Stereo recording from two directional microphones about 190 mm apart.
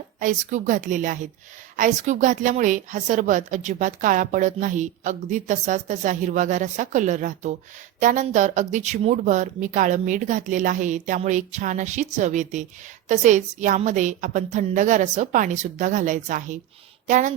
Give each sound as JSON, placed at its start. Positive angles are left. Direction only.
{"t": 0.2, "sound": "a woman's voice", "side_deg": -40}